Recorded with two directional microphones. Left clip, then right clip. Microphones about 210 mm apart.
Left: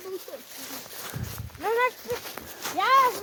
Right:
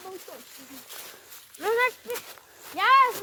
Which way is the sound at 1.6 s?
40° right (ahead or behind).